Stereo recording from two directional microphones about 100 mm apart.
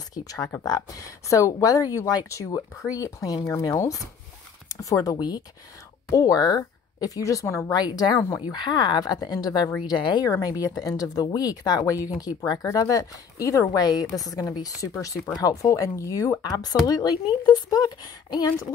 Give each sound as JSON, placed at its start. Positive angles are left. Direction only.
{"t": 0.1, "sound": "a woman's voice", "side_deg": 40}
{"t": 7.7, "sound": "speech", "side_deg": 40}